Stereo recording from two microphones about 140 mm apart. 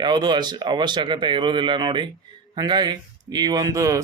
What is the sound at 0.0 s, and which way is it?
Speech, 30° right (ahead or behind).